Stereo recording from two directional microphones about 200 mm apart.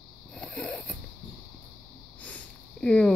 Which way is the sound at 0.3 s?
5° left (ahead or behind).